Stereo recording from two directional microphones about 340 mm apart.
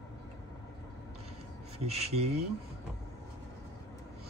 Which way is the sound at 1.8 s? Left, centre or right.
Centre.